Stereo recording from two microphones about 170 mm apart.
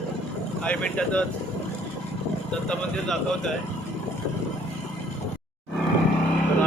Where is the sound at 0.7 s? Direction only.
5° left (ahead or behind).